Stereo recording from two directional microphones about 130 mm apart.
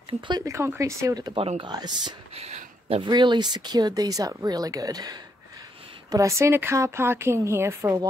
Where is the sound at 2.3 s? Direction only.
50° right (ahead or behind).